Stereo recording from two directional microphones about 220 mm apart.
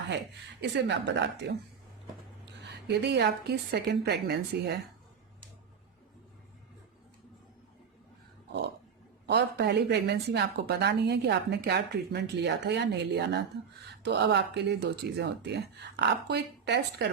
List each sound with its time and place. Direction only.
0.6 s speech: 50° right (ahead or behind)
2.6 s speech: 50° right (ahead or behind)
9.2 s speech: 50° right (ahead or behind)